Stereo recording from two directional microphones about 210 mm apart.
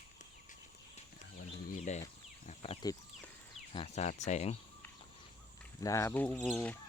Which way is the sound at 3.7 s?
30° left (ahead or behind).